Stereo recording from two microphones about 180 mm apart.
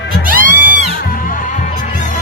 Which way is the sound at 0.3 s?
50° right (ahead or behind).